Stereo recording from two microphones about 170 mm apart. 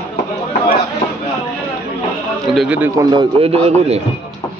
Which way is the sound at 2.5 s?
5° right (ahead or behind).